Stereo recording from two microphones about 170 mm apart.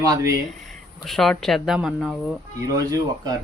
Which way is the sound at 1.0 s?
Centre (ahead or behind).